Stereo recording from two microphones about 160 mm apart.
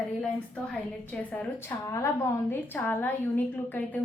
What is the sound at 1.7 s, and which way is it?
Speech, 20° left (ahead or behind).